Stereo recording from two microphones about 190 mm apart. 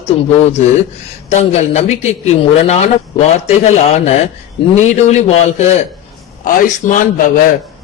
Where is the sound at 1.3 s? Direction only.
35° left (ahead or behind).